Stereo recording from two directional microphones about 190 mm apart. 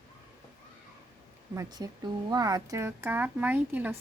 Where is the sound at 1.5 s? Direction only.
20° right (ahead or behind).